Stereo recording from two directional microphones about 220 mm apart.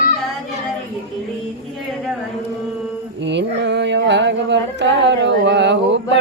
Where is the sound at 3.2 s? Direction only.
55° right (ahead or behind).